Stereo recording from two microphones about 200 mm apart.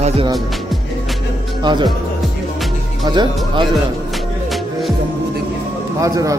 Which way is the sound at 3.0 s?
20° right (ahead or behind).